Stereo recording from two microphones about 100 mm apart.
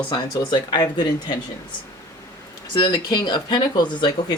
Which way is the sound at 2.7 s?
45° left (ahead or behind).